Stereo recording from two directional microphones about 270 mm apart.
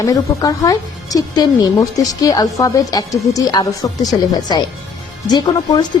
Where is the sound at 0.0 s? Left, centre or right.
Centre.